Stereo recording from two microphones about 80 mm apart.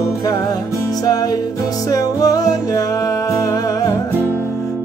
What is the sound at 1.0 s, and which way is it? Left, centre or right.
Music, left.